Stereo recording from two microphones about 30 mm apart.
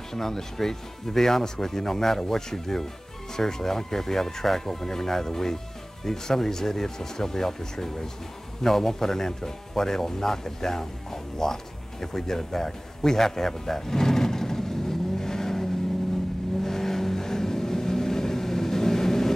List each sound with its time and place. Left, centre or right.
0.1 s speech: centre
16.6 s vehicle: centre